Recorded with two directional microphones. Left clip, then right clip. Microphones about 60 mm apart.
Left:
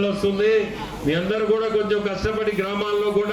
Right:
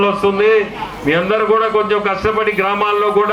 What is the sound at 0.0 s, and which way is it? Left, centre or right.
A man's voice, right.